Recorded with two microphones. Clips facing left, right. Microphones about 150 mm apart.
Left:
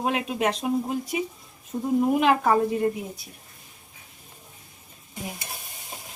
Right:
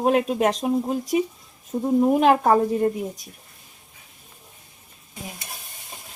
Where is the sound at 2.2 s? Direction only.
40° right (ahead or behind).